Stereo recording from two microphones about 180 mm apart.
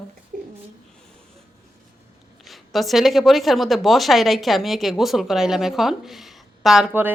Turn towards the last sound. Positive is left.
turn(degrees=-10)  # may be behind; listen again after turning